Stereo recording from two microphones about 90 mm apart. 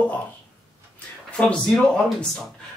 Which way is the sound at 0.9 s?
15° left (ahead or behind).